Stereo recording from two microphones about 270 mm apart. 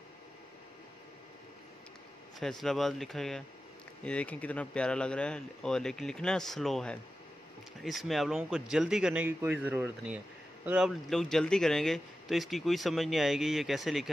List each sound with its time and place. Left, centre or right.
2.4 s speech: centre